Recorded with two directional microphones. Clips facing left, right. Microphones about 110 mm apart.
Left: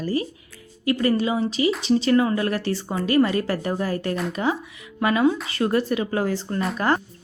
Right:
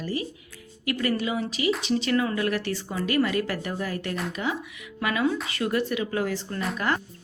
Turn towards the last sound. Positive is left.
turn(degrees=35)  # may be behind; listen again after turning